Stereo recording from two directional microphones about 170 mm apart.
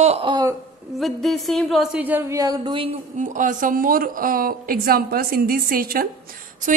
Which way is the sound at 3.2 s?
50° right (ahead or behind).